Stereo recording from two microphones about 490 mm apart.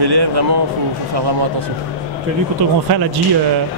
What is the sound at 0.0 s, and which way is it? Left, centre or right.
Speech, right.